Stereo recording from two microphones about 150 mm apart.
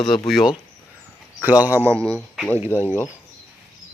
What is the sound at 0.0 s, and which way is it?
Speech, 35° left (ahead or behind).